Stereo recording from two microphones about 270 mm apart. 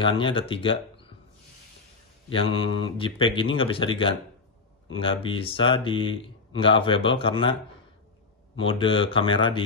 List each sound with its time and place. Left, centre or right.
0.0 s speech: centre
2.2 s mantra: centre
2.6 s speech: centre
8.6 s speech: centre